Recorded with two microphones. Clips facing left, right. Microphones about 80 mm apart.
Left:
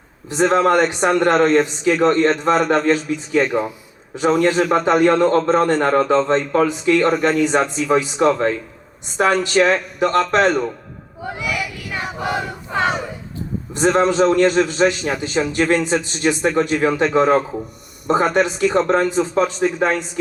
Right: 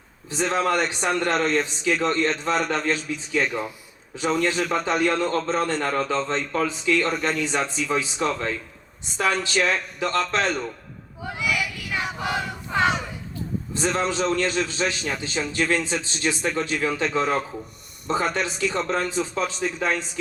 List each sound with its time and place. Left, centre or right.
0.3 s a man's voice: left
3.4 s a man's voice: left
11.2 s battle cry: centre
13.7 s a man's voice: left